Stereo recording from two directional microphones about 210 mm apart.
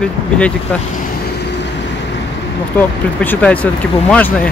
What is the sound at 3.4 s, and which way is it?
Speech, 5° left (ahead or behind).